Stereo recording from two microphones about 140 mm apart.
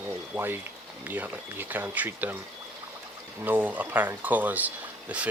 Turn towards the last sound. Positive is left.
turn(degrees=-10)  # may be behind; listen again after turning